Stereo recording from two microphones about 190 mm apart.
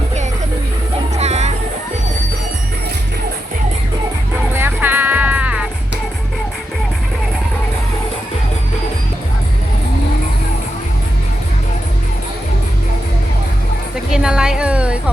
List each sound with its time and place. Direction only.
1.1 s music: 35° right (ahead or behind)
4.5 s music: 10° right (ahead or behind)
14.1 s music: 5° right (ahead or behind)